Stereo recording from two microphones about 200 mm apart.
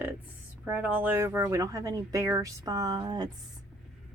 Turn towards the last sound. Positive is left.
turn(degrees=-20)  # may be behind; listen again after turning